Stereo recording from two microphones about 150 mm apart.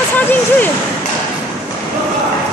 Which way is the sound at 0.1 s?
10° left (ahead or behind).